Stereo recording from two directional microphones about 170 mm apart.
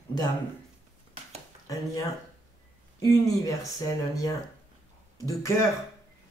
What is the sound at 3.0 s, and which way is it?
Speech, 20° left (ahead or behind).